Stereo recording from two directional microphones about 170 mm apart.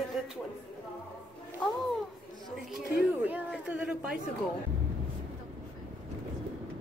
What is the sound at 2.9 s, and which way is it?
A woman's voice, 10° right (ahead or behind).